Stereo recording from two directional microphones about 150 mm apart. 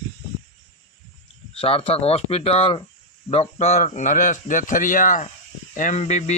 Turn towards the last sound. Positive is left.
turn(degrees=50)  # may be behind; listen again after turning